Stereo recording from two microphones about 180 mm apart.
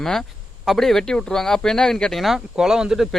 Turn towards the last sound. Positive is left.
turn(degrees=-5)  # may be behind; listen again after turning